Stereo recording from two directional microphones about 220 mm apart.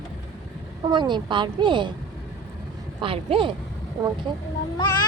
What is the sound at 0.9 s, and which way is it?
Speech, 20° right (ahead or behind).